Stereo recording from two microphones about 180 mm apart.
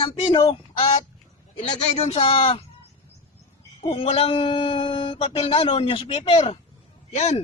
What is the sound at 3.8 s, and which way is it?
Speech, 35° left (ahead or behind).